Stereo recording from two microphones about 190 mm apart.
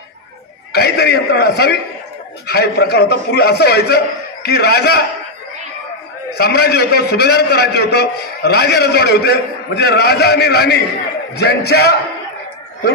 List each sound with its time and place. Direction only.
0.7 s a man's voice: 55° left (ahead or behind)
6.3 s a man's voice: 55° left (ahead or behind)